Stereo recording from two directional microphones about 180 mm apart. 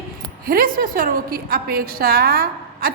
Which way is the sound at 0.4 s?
55° right (ahead or behind).